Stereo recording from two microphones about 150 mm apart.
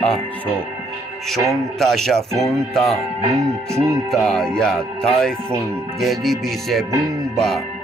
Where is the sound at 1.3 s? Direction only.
Centre (ahead or behind).